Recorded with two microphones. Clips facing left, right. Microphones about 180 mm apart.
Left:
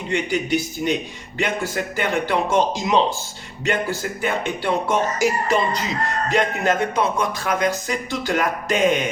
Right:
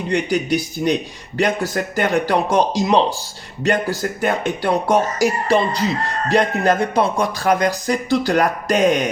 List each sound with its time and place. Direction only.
0.1 s speech: 40° right (ahead or behind)